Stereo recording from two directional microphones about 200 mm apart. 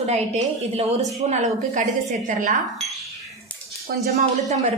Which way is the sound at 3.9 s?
50° right (ahead or behind).